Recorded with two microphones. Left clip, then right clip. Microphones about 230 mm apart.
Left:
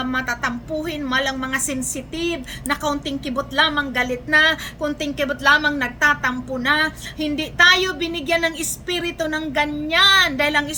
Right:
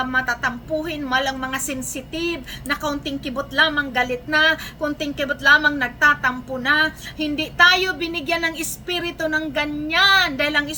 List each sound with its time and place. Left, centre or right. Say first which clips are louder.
0.0 s a woman's voice: right 2 dB; centre